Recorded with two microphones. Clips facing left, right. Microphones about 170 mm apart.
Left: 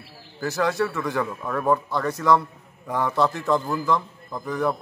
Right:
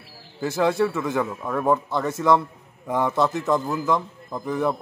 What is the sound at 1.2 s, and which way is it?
Speech, 5° right (ahead or behind).